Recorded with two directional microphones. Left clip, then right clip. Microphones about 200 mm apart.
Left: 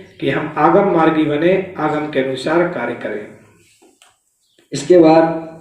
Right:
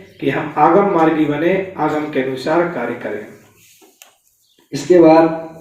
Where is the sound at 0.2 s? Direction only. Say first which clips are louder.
Right 1 dB; 45° left (ahead or behind).